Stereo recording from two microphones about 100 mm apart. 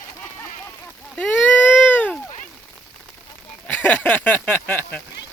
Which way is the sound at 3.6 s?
15° left (ahead or behind).